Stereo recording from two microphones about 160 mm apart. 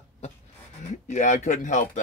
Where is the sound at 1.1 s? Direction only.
45° left (ahead or behind).